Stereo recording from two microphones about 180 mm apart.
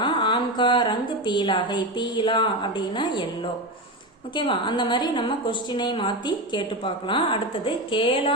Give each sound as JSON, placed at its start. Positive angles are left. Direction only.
{"t": 0.0, "sound": "a woman's voice", "side_deg": 25}
{"t": 4.4, "sound": "a woman's voice", "side_deg": 25}